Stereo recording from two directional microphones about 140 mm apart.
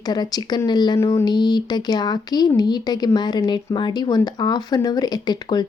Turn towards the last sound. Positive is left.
turn(degrees=30)  # may be behind; listen again after turning